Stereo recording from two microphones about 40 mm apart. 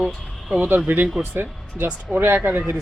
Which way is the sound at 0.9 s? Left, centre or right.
Right.